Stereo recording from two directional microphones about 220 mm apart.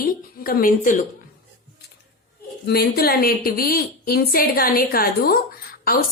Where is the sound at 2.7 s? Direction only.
45° left (ahead or behind).